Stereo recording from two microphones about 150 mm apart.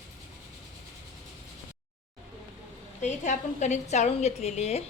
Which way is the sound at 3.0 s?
50° left (ahead or behind).